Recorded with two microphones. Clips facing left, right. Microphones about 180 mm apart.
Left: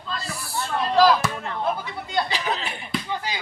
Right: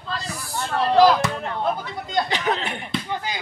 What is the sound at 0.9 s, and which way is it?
Chop, 20° right (ahead or behind).